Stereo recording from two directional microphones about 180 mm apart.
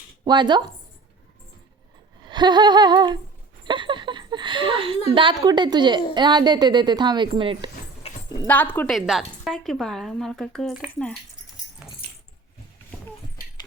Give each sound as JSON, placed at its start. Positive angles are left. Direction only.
{"t": 0.3, "sound": "a woman's voice", "side_deg": -25}
{"t": 2.2, "sound": "a sound", "side_deg": -25}
{"t": 5.1, "sound": "a woman's voice", "side_deg": -25}
{"t": 8.0, "sound": "a sound", "side_deg": 35}
{"t": 8.4, "sound": "a woman's voice", "side_deg": 10}
{"t": 8.9, "sound": "a woman's voice", "side_deg": 0}